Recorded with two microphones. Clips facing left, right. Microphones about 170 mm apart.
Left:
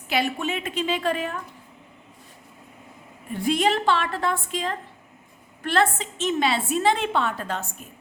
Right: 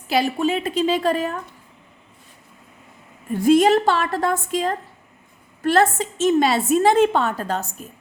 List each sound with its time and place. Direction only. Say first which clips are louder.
0.1 s a woman's voice: right 6 dB; 35° right (ahead or behind)
3.3 s a woman's voice: right 8 dB; 45° right (ahead or behind)